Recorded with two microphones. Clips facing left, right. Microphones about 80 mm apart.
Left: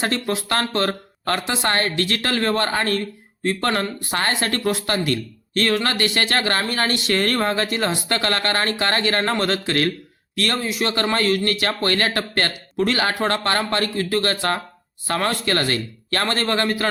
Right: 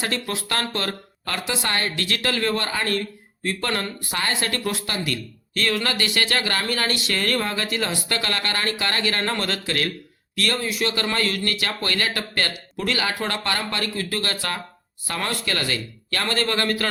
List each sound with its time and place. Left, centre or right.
0.0 s speech: left